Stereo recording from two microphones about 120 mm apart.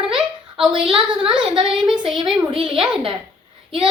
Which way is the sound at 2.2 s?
50° right (ahead or behind).